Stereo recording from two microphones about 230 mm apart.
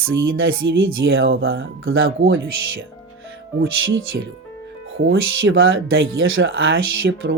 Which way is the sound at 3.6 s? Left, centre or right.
Right.